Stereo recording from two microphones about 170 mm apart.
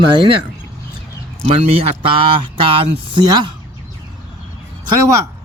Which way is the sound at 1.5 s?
35° right (ahead or behind).